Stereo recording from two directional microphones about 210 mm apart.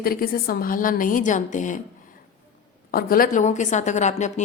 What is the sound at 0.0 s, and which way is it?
A woman's voice, 45° left (ahead or behind).